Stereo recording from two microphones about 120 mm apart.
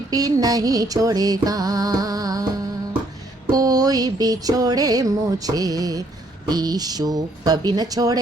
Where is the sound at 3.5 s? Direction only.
30° right (ahead or behind).